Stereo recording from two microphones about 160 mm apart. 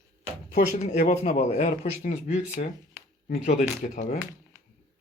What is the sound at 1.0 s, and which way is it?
Speech, 40° left (ahead or behind).